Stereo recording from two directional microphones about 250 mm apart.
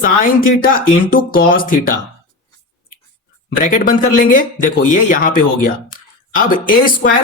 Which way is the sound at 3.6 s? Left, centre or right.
Left.